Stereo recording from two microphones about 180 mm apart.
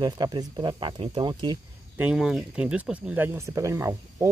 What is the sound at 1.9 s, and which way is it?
Speech, 5° right (ahead or behind).